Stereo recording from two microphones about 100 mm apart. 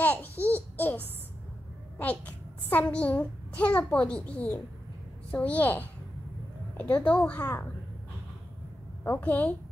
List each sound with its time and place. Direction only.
0.0 s babbling: 15° left (ahead or behind)
2.0 s a sound: 15° left (ahead or behind)
2.9 s a child's voice: 15° left (ahead or behind)
9.0 s a child's voice: 15° left (ahead or behind)